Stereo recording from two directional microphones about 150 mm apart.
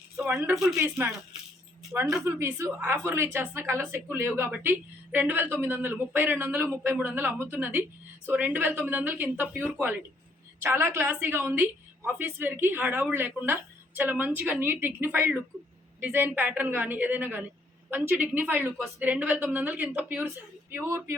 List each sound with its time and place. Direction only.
0.2 s speech: 10° right (ahead or behind)
0.8 s a woman's voice: 15° right (ahead or behind)
2.2 s a woman's voice: 15° right (ahead or behind)